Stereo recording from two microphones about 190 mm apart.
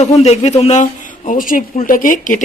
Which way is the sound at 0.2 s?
35° left (ahead or behind).